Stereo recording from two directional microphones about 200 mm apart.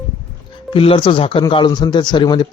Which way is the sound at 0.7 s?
25° left (ahead or behind).